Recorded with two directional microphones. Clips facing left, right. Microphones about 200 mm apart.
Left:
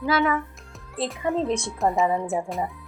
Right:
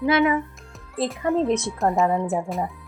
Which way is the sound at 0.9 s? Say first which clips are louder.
Right 3 dB; centre (ahead or behind).